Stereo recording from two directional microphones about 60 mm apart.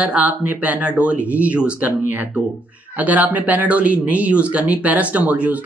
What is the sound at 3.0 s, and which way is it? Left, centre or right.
Speech, right.